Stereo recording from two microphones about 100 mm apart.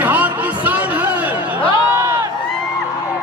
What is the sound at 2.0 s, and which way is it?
Crowd, 30° right (ahead or behind).